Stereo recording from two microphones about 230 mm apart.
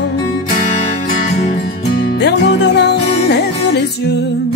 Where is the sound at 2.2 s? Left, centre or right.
Left.